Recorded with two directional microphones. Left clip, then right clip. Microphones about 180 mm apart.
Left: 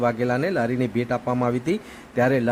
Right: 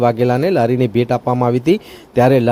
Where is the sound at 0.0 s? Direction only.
35° right (ahead or behind).